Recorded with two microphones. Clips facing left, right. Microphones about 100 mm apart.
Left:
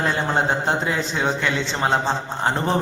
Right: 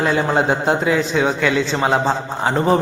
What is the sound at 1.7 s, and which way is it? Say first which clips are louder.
Speech: right 3 dB; 15° right (ahead or behind).